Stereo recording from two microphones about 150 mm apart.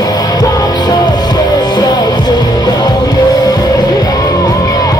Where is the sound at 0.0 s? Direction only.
25° left (ahead or behind).